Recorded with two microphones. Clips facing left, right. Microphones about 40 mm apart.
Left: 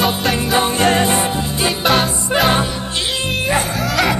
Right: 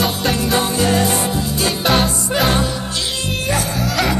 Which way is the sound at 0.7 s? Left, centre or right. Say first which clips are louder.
Left 2 dB; left.